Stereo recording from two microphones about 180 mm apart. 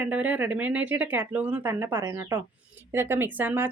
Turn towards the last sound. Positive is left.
turn(degrees=-10)  # may be behind; listen again after turning